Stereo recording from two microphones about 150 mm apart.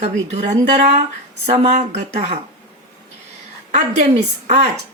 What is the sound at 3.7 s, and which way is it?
Speech, 50° right (ahead or behind).